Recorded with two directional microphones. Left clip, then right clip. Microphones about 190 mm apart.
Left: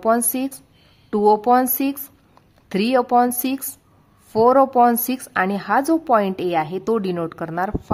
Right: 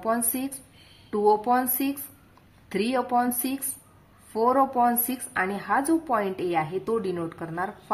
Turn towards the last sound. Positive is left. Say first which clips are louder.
# left 7 dB
turn(degrees=40)  # may be behind; listen again after turning